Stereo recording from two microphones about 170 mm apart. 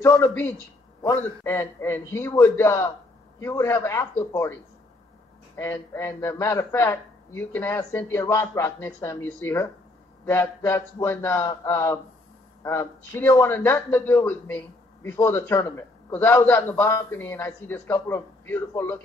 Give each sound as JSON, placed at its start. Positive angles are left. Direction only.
{"t": 0.0, "sound": "a man's voice", "side_deg": 15}
{"t": 5.6, "sound": "a man's voice", "side_deg": 15}